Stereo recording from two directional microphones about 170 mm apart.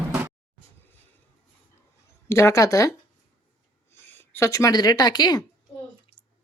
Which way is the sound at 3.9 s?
15° left (ahead or behind).